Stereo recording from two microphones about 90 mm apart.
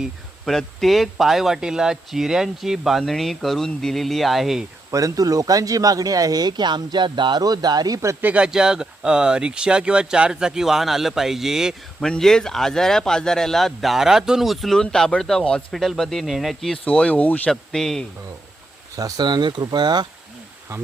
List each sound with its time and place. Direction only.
0.0 s speech: centre (ahead or behind)
4.9 s speech: 40° right (ahead or behind)
8.2 s speech: 15° right (ahead or behind)
11.9 s speech: 5° left (ahead or behind)
16.8 s speech: 15° left (ahead or behind)
17.5 s speech: 5° left (ahead or behind)
18.9 s speech: 40° right (ahead or behind)
19.2 s speech: 55° right (ahead or behind)